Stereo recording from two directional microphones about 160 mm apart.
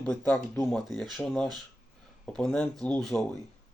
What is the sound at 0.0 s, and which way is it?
Speech, 10° left (ahead or behind).